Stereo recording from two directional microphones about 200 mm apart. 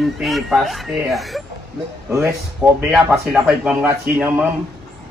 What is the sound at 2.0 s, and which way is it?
Speech, 10° right (ahead or behind).